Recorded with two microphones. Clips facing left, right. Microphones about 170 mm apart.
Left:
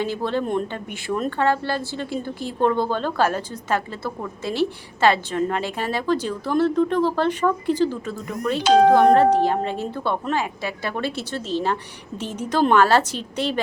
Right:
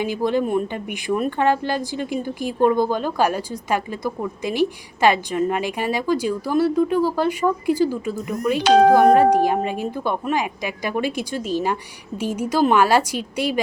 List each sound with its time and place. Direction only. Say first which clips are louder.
0.0 s a woman's voice: right 3 dB; 15° right (ahead or behind)
8.6 s speech: right 1 dB; 65° right (ahead or behind)
8.9 s a woman's voice: right 1 dB; 10° right (ahead or behind)